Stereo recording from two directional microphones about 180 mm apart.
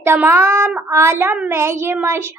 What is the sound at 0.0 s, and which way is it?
A child's voice, 15° right (ahead or behind).